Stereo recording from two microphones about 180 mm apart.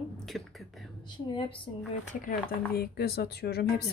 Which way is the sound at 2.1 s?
50° left (ahead or behind).